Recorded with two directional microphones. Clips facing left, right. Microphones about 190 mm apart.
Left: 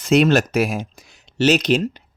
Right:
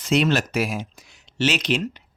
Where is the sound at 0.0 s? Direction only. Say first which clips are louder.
Left 5 dB; 45° left (ahead or behind).